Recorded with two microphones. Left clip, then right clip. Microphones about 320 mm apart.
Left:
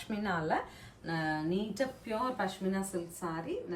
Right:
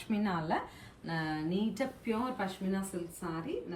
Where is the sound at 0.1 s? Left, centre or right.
Centre.